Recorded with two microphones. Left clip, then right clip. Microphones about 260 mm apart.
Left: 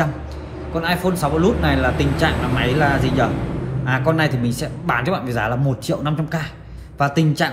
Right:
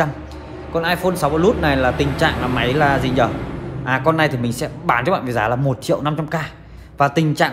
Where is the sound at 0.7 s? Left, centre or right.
Right.